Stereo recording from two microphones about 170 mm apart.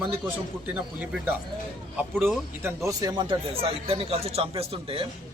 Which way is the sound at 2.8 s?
20° right (ahead or behind).